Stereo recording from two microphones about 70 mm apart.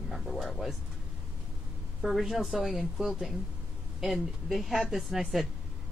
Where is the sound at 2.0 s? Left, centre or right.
Centre.